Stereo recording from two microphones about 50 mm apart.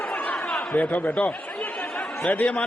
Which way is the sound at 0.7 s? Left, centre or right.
Left.